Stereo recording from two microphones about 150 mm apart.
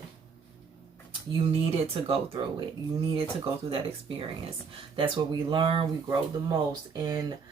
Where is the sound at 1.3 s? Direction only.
40° right (ahead or behind).